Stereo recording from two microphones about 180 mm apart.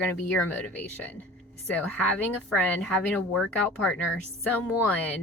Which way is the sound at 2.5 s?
5° left (ahead or behind).